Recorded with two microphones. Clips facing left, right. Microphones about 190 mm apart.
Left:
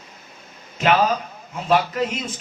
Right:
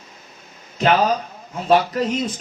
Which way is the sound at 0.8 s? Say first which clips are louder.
Right 1 dB; 35° right (ahead or behind).